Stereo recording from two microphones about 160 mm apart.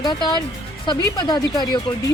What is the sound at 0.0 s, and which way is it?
Speech, 30° left (ahead or behind).